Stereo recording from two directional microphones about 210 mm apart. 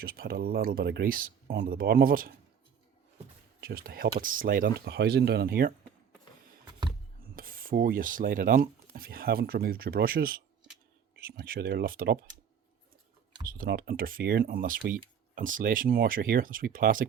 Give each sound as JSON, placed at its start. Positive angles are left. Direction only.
{"t": 0.0, "sound": "speech", "side_deg": -45}
{"t": 3.6, "sound": "speech", "side_deg": -45}
{"t": 7.2, "sound": "speech", "side_deg": -45}
{"t": 13.5, "sound": "speech", "side_deg": -45}